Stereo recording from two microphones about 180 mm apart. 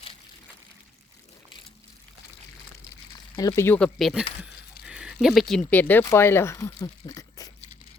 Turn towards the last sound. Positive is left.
turn(degrees=20)  # may be behind; listen again after turning